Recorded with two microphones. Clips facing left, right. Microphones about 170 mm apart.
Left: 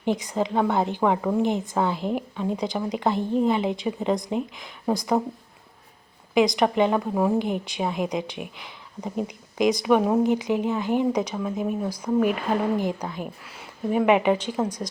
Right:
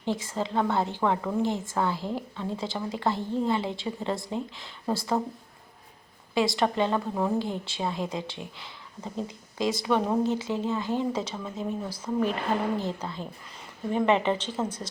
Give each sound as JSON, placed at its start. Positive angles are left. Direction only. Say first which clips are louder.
{"t": 0.0, "sound": "a woman's voice", "louder": "left 5 dB", "side_deg": 15}
{"t": 6.3, "sound": "a woman's voice", "louder": "left 5 dB", "side_deg": 15}